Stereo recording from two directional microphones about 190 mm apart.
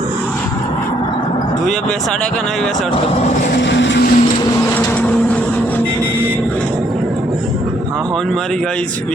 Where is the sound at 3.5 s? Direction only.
65° left (ahead or behind).